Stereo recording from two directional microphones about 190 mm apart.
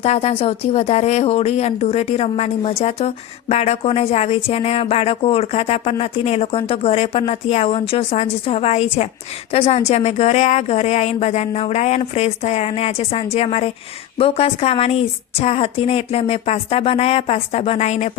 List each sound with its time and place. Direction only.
0.0 s speech: 35° left (ahead or behind)